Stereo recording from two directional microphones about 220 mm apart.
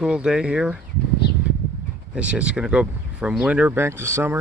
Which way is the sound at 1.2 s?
45° left (ahead or behind).